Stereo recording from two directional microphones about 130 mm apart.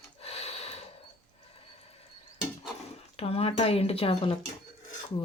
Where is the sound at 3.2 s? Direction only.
50° left (ahead or behind).